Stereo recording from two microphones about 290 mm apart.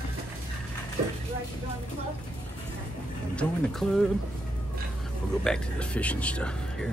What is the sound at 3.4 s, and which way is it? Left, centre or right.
Speech, centre.